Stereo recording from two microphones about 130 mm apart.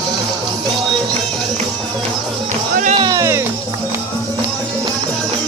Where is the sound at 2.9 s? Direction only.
30° right (ahead or behind).